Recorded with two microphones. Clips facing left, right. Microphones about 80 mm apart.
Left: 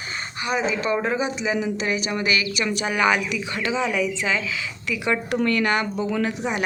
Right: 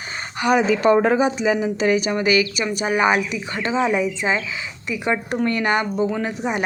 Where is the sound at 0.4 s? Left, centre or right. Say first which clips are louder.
Right 8 dB; right.